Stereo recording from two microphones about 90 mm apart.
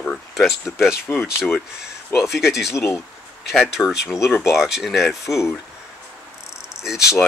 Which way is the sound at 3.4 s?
Centre (ahead or behind).